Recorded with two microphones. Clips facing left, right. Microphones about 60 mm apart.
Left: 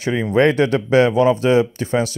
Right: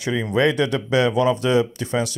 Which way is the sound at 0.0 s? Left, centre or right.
Left.